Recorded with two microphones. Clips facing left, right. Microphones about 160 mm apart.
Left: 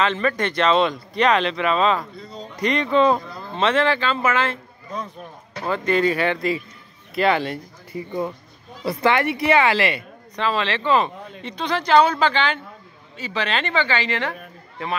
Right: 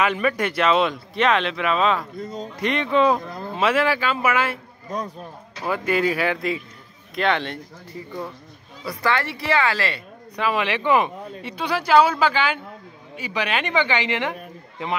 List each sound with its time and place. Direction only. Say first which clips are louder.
0.0 s speech: even; 10° right (ahead or behind)
2.1 s speech: right 5 dB; 45° right (ahead or behind)
2.5 s speech: left 2 dB; centre (ahead or behind)
5.7 s speech: left 2 dB; 5° right (ahead or behind)
8.8 s a woman's voice: left 4 dB; 20° left (ahead or behind)
10.3 s speech: even; 10° right (ahead or behind)